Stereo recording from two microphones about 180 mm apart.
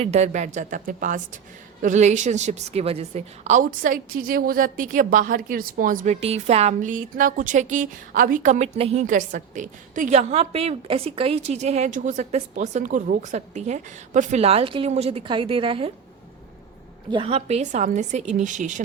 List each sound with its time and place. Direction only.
0.0 s a woman's voice: 40° right (ahead or behind)
17.1 s a woman's voice: 30° right (ahead or behind)